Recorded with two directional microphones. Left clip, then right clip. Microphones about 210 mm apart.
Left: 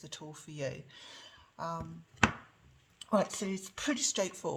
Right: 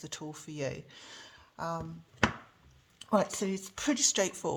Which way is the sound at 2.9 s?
30° right (ahead or behind).